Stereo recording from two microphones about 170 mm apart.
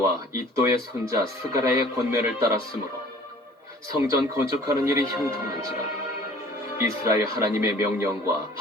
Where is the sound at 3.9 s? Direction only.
15° right (ahead or behind).